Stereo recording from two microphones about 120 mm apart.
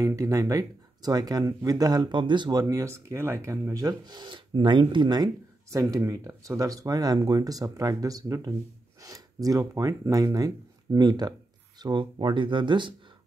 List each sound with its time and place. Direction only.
0.0 s speech: 25° right (ahead or behind)
2.6 s speech: 25° right (ahead or behind); by 12.9 s 40° right (ahead or behind)